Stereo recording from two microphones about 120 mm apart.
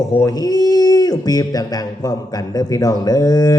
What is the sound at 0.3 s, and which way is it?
Speech, 30° left (ahead or behind).